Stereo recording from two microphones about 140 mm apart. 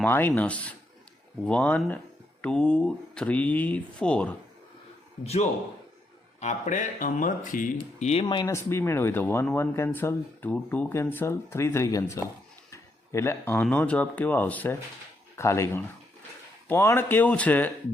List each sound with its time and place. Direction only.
0.0 s speech: 15° left (ahead or behind)
5.2 s speech: 50° left (ahead or behind)
6.4 s speech: 60° left (ahead or behind)
8.0 s speech: 40° left (ahead or behind)
8.4 s speech: 20° left (ahead or behind)